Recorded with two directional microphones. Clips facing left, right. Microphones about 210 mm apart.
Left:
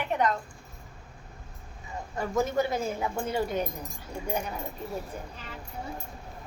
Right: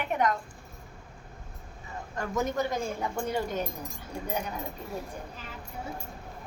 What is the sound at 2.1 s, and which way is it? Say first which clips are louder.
Speech: left 3 dB; 5° left (ahead or behind).